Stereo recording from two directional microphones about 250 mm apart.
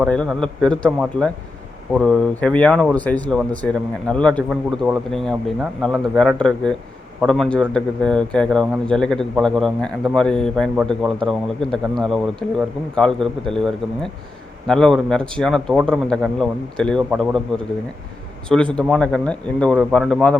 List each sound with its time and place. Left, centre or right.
0.0 s a man's voice: centre
18.4 s a man's voice: centre